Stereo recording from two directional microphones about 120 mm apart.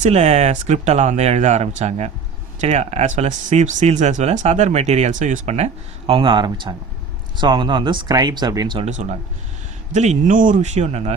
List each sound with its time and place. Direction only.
0.0 s speech: 65° right (ahead or behind); by 8.8 s 35° right (ahead or behind)
8.8 s speech: 75° right (ahead or behind)